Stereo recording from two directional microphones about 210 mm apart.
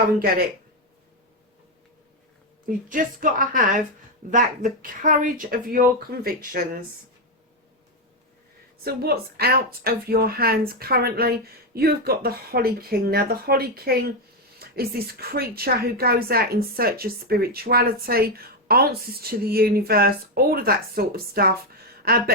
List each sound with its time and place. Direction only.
2.6 s speech: 40° right (ahead or behind)
8.8 s a woman's voice: 50° right (ahead or behind)